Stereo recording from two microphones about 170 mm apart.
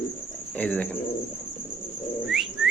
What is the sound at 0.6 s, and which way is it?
Speech, 10° left (ahead or behind).